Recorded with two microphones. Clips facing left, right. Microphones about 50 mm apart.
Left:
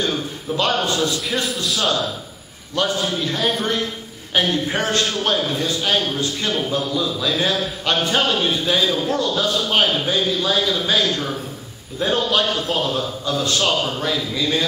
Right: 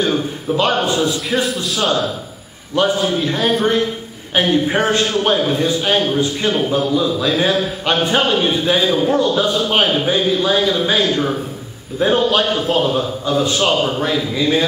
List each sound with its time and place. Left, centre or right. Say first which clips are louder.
0.0 s a man's voice: right 5 dB; centre
2.7 s a man's voice: right 5 dB; centre
12.3 s a man's voice: right 4 dB; centre